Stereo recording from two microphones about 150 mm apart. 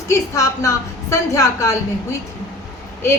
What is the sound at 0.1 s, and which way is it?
A woman's voice, 20° left (ahead or behind).